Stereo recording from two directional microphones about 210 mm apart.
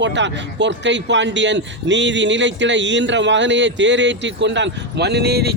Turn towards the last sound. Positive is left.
turn(degrees=-50)  # may be behind; listen again after turning